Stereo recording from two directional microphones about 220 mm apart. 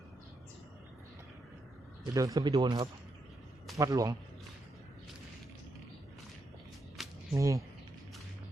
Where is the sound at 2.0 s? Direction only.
15° right (ahead or behind).